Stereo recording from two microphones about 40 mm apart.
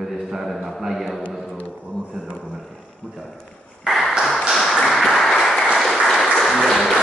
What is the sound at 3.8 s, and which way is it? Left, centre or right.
Tap, centre.